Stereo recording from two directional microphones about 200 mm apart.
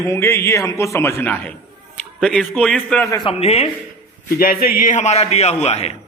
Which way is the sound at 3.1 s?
25° left (ahead or behind).